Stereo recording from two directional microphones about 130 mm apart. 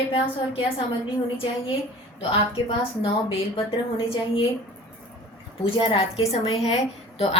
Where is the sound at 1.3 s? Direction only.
45° left (ahead or behind).